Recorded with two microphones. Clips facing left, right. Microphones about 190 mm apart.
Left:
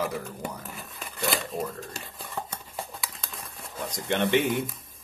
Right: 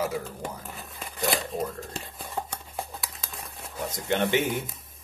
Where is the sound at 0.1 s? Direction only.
Centre (ahead or behind).